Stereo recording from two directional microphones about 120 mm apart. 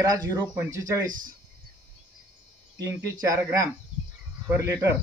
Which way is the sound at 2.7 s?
30° right (ahead or behind).